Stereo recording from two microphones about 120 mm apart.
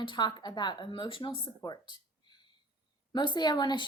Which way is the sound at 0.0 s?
40° left (ahead or behind).